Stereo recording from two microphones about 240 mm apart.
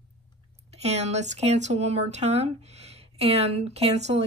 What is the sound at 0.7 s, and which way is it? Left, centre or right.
Speech, right.